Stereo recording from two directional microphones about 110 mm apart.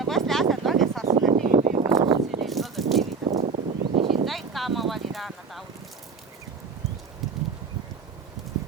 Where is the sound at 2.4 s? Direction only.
Centre (ahead or behind).